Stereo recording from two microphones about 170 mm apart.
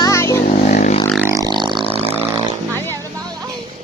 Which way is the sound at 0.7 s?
40° left (ahead or behind).